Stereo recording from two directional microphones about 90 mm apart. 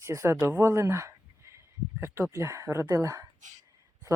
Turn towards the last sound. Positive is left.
turn(degrees=-35)  # may be behind; listen again after turning